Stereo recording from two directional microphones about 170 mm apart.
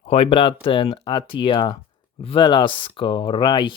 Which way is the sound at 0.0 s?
35° left (ahead or behind).